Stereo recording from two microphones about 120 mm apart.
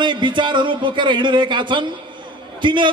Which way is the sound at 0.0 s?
40° right (ahead or behind).